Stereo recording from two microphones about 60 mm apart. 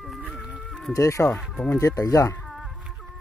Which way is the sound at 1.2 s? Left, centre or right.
Left.